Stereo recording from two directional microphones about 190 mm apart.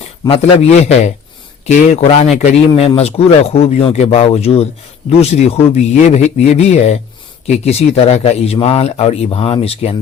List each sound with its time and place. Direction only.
0.3 s speech: 30° left (ahead or behind)